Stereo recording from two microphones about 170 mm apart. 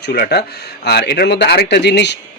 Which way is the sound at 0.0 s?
70° left (ahead or behind).